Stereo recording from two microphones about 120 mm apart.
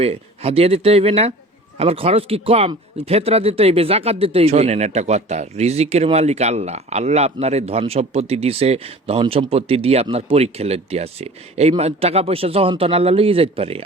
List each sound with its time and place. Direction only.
0.0 s a man's voice: 55° right (ahead or behind)